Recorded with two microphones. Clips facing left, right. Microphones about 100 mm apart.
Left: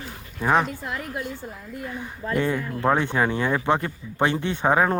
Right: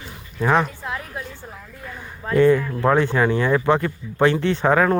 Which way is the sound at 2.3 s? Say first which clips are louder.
Right 9 dB; 20° left (ahead or behind).